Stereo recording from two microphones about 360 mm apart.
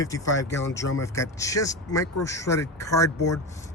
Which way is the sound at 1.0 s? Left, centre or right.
Centre.